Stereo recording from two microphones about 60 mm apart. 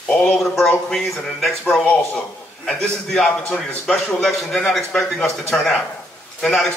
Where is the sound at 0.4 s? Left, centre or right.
Centre.